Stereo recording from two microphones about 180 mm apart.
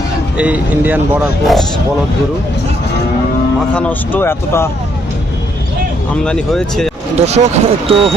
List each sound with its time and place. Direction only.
0.3 s speech: 10° right (ahead or behind)
3.8 s speech: 10° left (ahead or behind)
6.2 s speech: 5° left (ahead or behind)
7.2 s speech: 35° right (ahead or behind)